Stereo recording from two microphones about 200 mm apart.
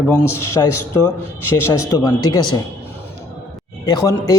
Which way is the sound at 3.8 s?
20° left (ahead or behind).